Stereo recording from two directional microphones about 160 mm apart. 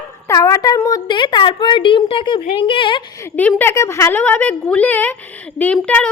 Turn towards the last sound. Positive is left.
turn(degrees=10)  # may be behind; listen again after turning